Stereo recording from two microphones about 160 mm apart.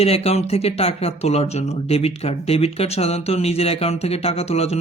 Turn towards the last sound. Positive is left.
turn(degrees=40)  # may be behind; listen again after turning